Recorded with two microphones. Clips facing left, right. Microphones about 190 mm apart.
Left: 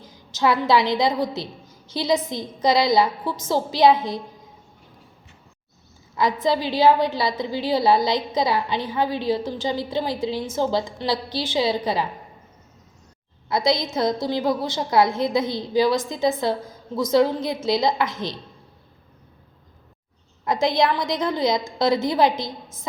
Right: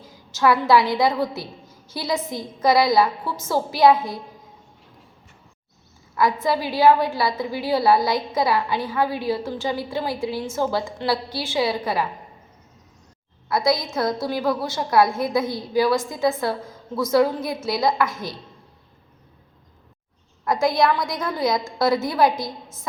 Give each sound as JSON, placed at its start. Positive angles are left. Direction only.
{"t": 0.0, "sound": "a woman's voice", "side_deg": 20}
{"t": 6.1, "sound": "a woman's voice", "side_deg": 20}
{"t": 13.7, "sound": "a woman's voice", "side_deg": 20}
{"t": 20.4, "sound": "a woman's voice", "side_deg": 20}